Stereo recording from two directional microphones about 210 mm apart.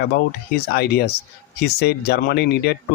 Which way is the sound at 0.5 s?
50° left (ahead or behind).